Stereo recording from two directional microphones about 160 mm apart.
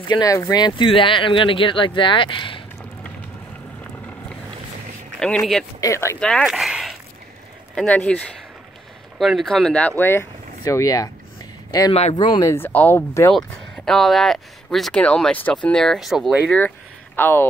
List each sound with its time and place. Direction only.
0.1 s speech: 20° left (ahead or behind)
5.2 s speech: 5° left (ahead or behind)
5.8 s speech: 20° left (ahead or behind)
6.2 s a sound: centre (ahead or behind)
7.7 s speech: 10° left (ahead or behind)
9.2 s speech: centre (ahead or behind); by 11.1 s 20° left (ahead or behind)
11.9 s speech: 40° left (ahead or behind)
12.5 s speech: 10° left (ahead or behind)
13.3 s speech: 5° left (ahead or behind)